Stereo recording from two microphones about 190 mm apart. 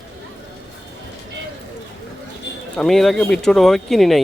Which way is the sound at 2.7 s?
Centre (ahead or behind).